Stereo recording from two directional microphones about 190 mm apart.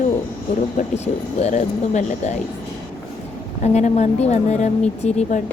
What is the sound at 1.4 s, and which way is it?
Speech, 40° left (ahead or behind).